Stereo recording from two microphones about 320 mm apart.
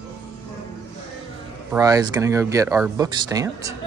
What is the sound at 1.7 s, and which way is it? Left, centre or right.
Speech, centre.